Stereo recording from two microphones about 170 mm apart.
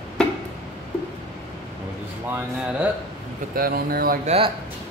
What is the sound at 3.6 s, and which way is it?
Speech, 60° right (ahead or behind).